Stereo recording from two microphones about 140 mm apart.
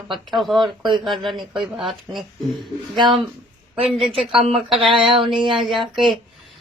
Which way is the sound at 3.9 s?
40° right (ahead or behind).